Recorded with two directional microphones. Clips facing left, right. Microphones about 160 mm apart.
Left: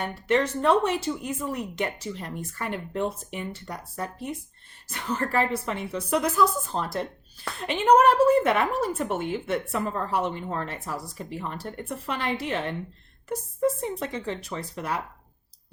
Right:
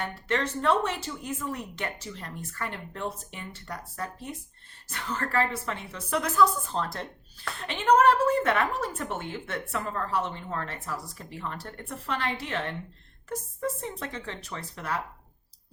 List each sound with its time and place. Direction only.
0.0 s a woman's voice: 15° left (ahead or behind)